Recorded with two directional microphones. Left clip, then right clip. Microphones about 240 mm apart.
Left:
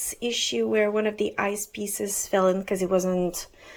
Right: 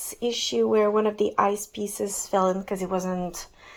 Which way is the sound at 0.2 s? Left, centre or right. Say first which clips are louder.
Right 2 dB; centre.